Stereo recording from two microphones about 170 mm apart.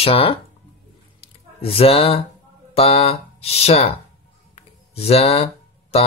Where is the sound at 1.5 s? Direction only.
35° left (ahead or behind).